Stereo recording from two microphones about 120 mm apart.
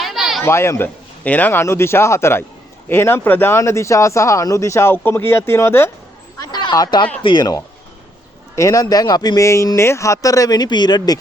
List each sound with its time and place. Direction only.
0.0 s a sound: centre (ahead or behind)
0.4 s speech: 20° left (ahead or behind)
6.4 s speech: 35° left (ahead or behind)